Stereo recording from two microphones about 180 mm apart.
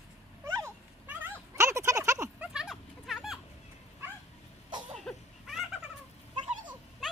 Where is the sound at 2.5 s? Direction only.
Centre (ahead or behind).